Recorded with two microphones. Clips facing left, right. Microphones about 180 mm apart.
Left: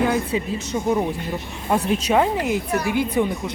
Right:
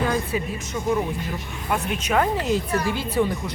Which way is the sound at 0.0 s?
20° left (ahead or behind).